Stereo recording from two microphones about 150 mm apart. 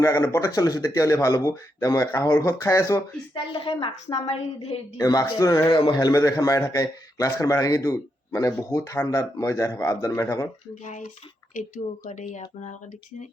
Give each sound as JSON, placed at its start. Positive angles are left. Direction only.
{"t": 0.0, "sound": "a man's voice", "side_deg": 20}
{"t": 3.5, "sound": "a woman's voice", "side_deg": 35}
{"t": 4.9, "sound": "a man's voice", "side_deg": 25}
{"t": 10.8, "sound": "speech", "side_deg": 55}